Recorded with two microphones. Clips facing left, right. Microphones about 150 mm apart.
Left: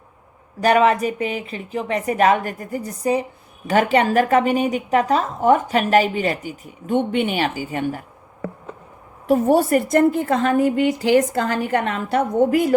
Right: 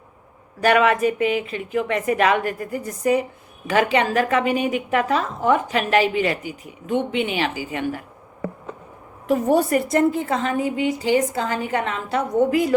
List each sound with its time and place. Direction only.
0.6 s a woman's voice: 35° left (ahead or behind)
9.6 s a woman's voice: 45° left (ahead or behind)